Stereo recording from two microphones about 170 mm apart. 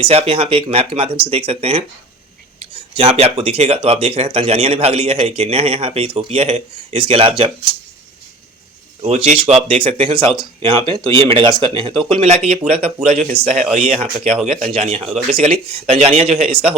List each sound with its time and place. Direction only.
0.0 s speech: 35° right (ahead or behind)
2.9 s speech: 35° right (ahead or behind)
9.0 s speech: 40° right (ahead or behind)